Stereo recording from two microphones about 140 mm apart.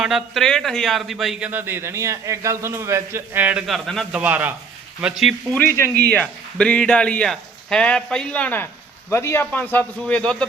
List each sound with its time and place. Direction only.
0.0 s speech: 5° right (ahead or behind)
1.5 s a man's voice: 15° right (ahead or behind)
3.7 s speech: centre (ahead or behind)
4.2 s speech: 10° right (ahead or behind)
5.5 s speech: 15° left (ahead or behind)